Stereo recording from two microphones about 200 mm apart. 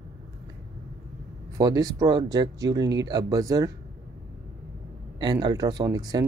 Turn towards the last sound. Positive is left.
turn(degrees=-20)  # may be behind; listen again after turning